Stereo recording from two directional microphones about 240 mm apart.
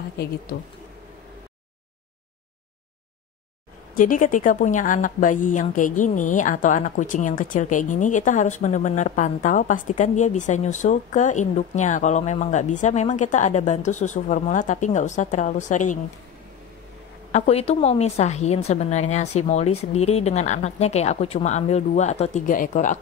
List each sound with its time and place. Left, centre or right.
3.9 s a woman's voice: left
17.3 s a woman's voice: left